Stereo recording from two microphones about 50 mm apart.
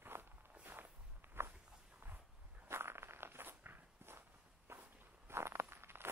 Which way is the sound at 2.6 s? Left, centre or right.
Right.